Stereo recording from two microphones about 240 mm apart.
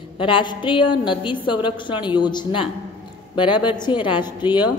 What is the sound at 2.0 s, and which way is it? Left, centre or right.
Speech, centre.